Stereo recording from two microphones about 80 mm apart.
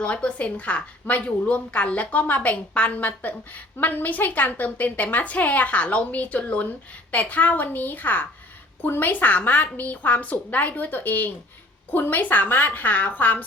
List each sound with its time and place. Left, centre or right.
0.0 s a woman's voice: centre